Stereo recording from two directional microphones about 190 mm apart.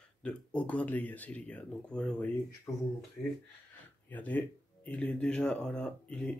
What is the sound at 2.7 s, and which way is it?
Speech, 15° left (ahead or behind).